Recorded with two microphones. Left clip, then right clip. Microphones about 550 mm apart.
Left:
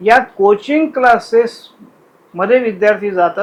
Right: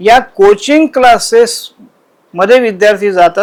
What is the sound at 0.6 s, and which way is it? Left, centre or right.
A man's voice, right.